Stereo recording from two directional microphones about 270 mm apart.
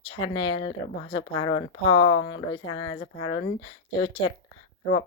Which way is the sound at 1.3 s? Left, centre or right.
Left.